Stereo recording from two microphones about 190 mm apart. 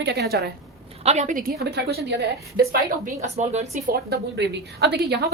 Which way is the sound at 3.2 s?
35° right (ahead or behind).